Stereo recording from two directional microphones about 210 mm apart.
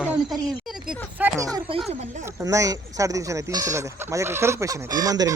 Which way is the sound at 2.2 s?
15° right (ahead or behind).